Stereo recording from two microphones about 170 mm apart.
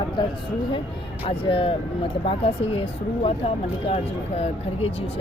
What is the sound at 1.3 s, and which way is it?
Speech, 30° left (ahead or behind).